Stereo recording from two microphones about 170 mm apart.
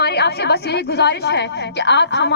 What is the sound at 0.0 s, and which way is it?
A woman's voice, 70° left (ahead or behind).